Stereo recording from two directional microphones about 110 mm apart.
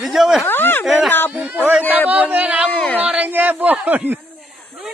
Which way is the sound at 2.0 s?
15° right (ahead or behind).